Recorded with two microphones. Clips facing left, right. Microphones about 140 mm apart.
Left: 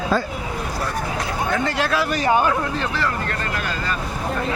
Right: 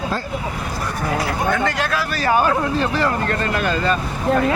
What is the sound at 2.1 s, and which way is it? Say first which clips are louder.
Speech: right 2 dB; 20° left (ahead or behind).